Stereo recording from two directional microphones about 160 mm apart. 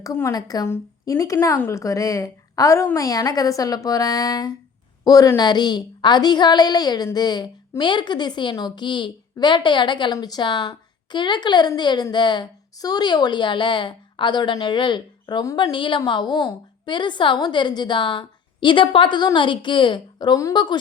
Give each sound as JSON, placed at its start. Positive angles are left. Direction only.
{"t": 0.0, "sound": "a woman's voice", "side_deg": 20}